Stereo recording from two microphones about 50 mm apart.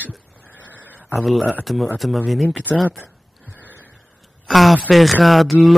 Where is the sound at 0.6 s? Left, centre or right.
Left.